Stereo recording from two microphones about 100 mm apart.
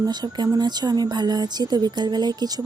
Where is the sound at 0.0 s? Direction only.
45° right (ahead or behind).